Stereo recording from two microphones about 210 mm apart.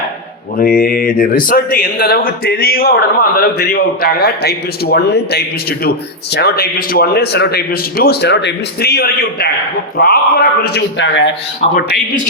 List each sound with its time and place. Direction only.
0.5 s speech: 45° left (ahead or behind)